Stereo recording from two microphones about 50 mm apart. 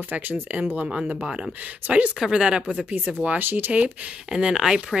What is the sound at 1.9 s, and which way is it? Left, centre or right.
Speech, right.